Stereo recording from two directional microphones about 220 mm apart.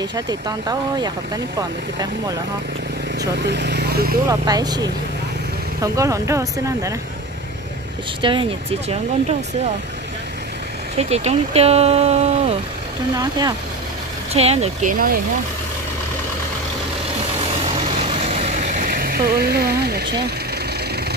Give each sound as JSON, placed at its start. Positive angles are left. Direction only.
{"t": 0.0, "sound": "speech", "side_deg": -20}
{"t": 3.2, "sound": "speech", "side_deg": -50}
{"t": 4.3, "sound": "speech", "side_deg": -15}
{"t": 8.2, "sound": "speech", "side_deg": -20}
{"t": 11.0, "sound": "speech", "side_deg": -30}
{"t": 13.1, "sound": "speech", "side_deg": -15}
{"t": 14.3, "sound": "speech", "side_deg": -30}
{"t": 17.6, "sound": "vehicle", "side_deg": -25}